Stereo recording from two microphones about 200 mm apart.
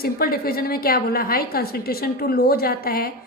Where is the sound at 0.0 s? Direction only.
50° left (ahead or behind).